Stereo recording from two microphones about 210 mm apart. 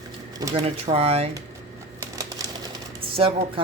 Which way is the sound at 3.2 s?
25° right (ahead or behind).